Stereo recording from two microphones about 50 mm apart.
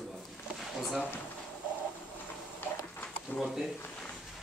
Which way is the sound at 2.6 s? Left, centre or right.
Left.